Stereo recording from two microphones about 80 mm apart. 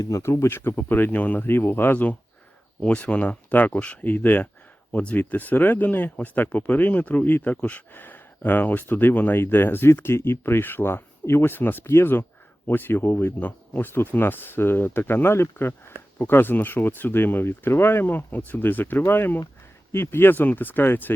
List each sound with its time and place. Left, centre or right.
0.2 s speech: left